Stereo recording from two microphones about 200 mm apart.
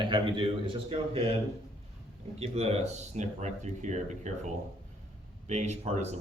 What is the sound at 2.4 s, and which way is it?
Speech, 30° right (ahead or behind).